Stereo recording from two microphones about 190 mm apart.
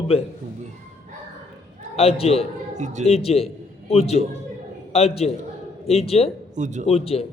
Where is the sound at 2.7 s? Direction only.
40° right (ahead or behind).